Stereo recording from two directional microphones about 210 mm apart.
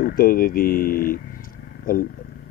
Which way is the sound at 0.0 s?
45° left (ahead or behind).